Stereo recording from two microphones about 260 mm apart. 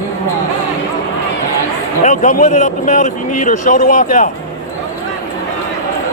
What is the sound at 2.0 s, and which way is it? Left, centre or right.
Speech, left.